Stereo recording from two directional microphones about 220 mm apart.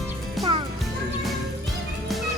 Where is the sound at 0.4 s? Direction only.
Centre (ahead or behind).